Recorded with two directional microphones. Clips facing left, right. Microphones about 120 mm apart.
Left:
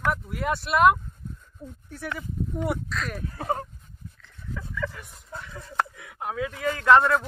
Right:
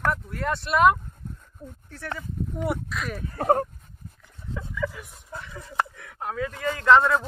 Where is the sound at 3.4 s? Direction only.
55° right (ahead or behind).